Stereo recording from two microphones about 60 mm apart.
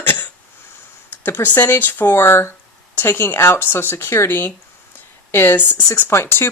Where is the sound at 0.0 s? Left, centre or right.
Left.